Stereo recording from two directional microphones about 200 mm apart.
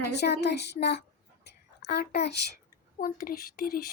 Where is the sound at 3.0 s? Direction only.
45° left (ahead or behind).